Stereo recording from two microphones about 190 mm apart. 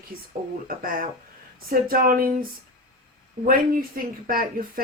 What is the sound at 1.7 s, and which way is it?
Speech, 50° right (ahead or behind).